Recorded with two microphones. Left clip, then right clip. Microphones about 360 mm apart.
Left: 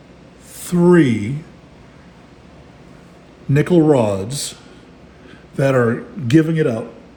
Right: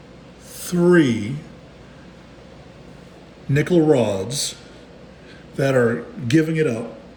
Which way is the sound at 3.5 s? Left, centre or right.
Centre.